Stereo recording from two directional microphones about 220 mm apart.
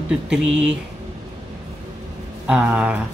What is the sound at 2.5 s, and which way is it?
Speech, 5° right (ahead or behind).